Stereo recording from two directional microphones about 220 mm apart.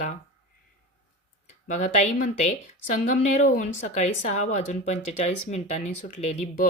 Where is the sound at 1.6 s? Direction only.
30° left (ahead or behind).